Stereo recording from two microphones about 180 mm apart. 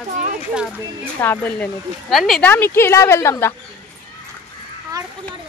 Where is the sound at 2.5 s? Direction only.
10° left (ahead or behind).